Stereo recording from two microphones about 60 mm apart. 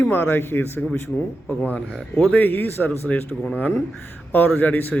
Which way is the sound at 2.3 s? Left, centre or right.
Left.